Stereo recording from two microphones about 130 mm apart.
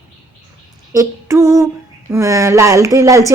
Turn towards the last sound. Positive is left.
turn(degrees=-25)  # may be behind; listen again after turning